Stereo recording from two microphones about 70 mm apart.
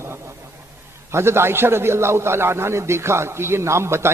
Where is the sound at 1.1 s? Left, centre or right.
Right.